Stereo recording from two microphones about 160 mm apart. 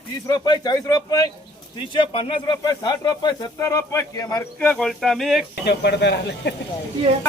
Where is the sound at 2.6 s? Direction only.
20° left (ahead or behind).